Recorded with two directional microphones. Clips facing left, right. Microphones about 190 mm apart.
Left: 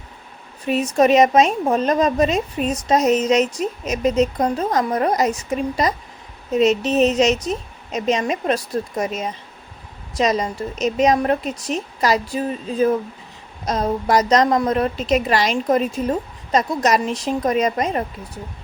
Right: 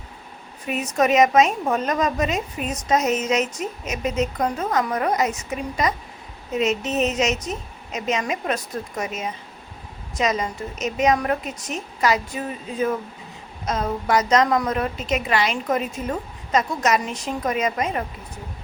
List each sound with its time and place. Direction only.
0.7 s speech: 30° left (ahead or behind)